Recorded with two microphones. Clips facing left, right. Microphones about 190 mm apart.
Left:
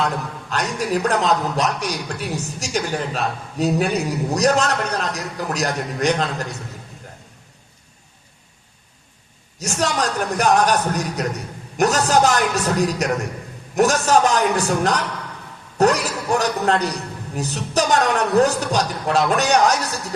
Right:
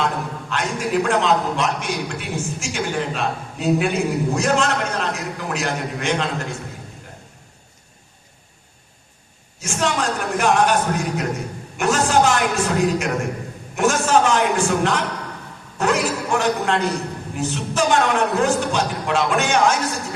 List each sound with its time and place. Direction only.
0.5 s a man's voice: 40° left (ahead or behind)
9.6 s a man's voice: 40° left (ahead or behind)